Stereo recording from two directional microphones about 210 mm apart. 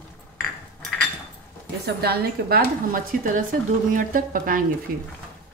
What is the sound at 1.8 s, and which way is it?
A woman's voice, 50° right (ahead or behind).